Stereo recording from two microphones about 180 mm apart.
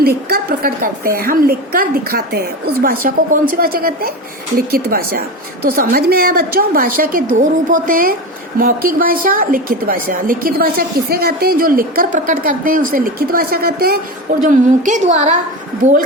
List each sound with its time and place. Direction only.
0.3 s a woman's voice: 55° right (ahead or behind)
14.4 s a woman's voice: 40° right (ahead or behind)